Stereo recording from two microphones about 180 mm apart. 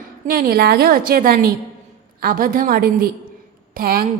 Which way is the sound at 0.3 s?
55° right (ahead or behind).